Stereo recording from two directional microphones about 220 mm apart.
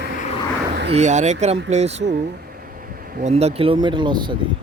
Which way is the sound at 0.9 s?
30° right (ahead or behind).